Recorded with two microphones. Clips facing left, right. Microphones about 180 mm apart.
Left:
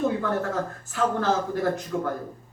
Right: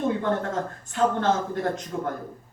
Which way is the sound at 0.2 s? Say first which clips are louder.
Even; 25° right (ahead or behind).